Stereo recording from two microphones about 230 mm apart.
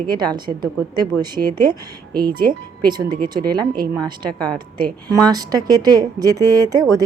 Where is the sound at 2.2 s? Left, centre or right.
Right.